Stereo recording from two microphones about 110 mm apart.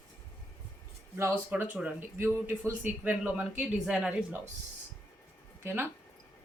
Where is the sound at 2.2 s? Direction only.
25° right (ahead or behind); by 4.1 s 10° right (ahead or behind).